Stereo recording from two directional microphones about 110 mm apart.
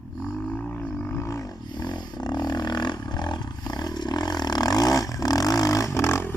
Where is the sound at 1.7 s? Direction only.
40° left (ahead or behind).